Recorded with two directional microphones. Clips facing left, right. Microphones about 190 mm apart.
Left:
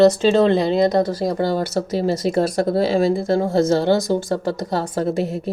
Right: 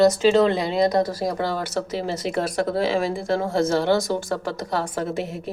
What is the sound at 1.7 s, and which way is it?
Speech, 40° left (ahead or behind).